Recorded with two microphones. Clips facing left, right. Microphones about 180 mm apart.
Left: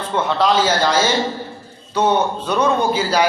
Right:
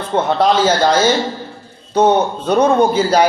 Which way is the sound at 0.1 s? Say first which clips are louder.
Right 4 dB; 45° right (ahead or behind).